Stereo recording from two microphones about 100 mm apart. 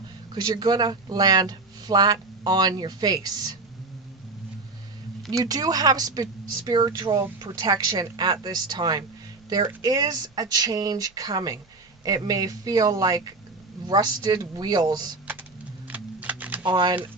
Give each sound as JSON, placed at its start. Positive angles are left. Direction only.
{"t": 0.3, "sound": "speech", "side_deg": -45}
{"t": 5.3, "sound": "speech", "side_deg": -40}
{"t": 15.9, "sound": "typing", "side_deg": -15}
{"t": 16.6, "sound": "speech", "side_deg": -50}